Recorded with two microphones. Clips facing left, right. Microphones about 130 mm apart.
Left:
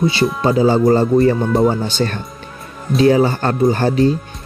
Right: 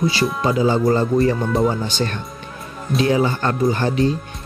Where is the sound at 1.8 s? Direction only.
40° left (ahead or behind).